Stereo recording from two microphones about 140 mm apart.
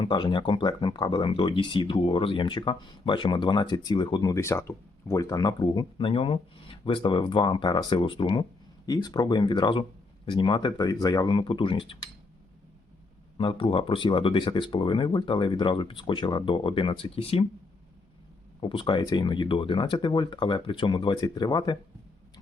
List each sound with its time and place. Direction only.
0.0 s speech: 35° left (ahead or behind)
13.3 s speech: 35° left (ahead or behind)
18.6 s speech: 35° left (ahead or behind)